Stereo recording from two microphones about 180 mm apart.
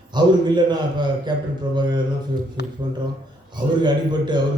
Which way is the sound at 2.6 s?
70° left (ahead or behind).